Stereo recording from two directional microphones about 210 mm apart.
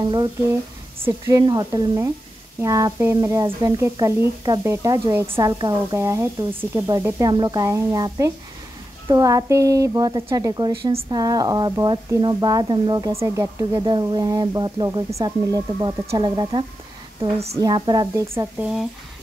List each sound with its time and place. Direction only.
0.0 s a woman's voice: 20° right (ahead or behind)
17.6 s a woman's voice: 20° right (ahead or behind)